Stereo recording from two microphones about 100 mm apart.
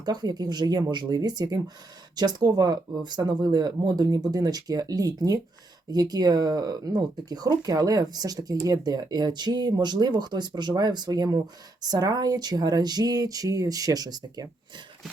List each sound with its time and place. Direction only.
0.0 s speech: 45° right (ahead or behind)